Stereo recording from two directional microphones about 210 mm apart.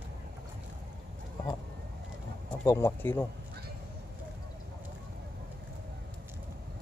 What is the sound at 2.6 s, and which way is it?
Speech, 15° left (ahead or behind).